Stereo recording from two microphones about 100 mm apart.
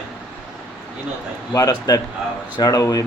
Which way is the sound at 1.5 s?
40° left (ahead or behind).